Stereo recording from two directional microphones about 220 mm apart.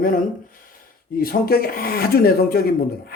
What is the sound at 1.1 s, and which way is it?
Speech, 40° left (ahead or behind).